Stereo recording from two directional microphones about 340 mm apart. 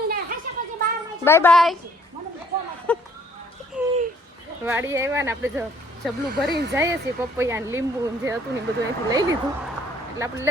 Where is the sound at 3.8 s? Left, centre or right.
Centre.